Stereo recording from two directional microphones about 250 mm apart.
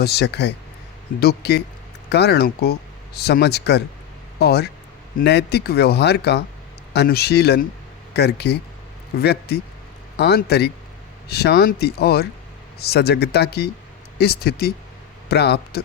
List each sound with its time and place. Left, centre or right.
0.0 s speech: left